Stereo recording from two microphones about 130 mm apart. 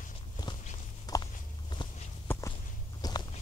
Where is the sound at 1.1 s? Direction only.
30° left (ahead or behind).